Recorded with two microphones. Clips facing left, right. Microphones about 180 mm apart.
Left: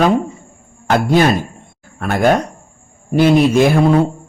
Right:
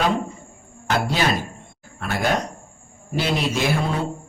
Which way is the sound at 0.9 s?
50° left (ahead or behind).